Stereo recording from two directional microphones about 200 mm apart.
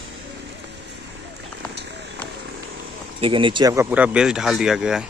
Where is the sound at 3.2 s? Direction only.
25° right (ahead or behind).